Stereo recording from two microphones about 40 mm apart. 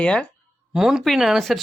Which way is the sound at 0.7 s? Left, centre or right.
Centre.